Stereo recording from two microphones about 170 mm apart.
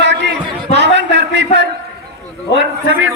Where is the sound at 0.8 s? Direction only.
90° right.